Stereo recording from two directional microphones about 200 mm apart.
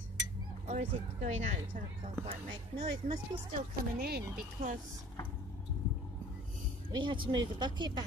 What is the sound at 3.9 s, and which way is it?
Speech, 50° right (ahead or behind).